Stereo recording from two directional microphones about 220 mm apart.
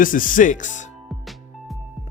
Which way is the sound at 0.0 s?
40° left (ahead or behind).